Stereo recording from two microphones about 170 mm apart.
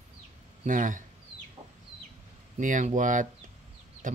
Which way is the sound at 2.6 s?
50° right (ahead or behind).